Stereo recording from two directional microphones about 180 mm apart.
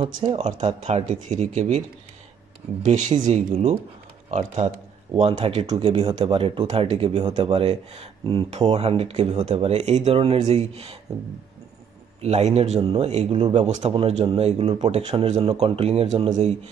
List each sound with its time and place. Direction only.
0.0 s speech: 30° right (ahead or behind)
2.8 s speech: 40° right (ahead or behind)
12.2 s speech: 35° right (ahead or behind)